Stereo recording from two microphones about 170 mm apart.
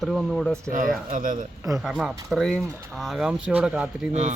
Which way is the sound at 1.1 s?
50° right (ahead or behind).